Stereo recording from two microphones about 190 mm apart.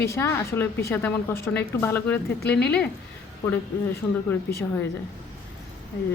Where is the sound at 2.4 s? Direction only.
60° left (ahead or behind).